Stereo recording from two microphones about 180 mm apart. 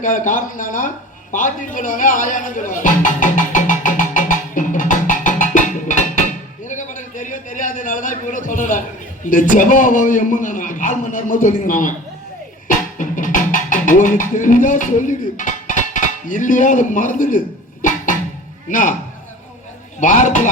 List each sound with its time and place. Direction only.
0.0 s a man's voice: 45° left (ahead or behind)
1.3 s music: 45° left (ahead or behind)
6.7 s a sound: 45° left (ahead or behind)
9.2 s a man's voice: 45° left (ahead or behind)
12.6 s music: 45° left (ahead or behind)
17.8 s a sound: 45° left (ahead or behind)
18.7 s a man's voice: 45° left (ahead or behind)
20.0 s a man's voice: 45° left (ahead or behind)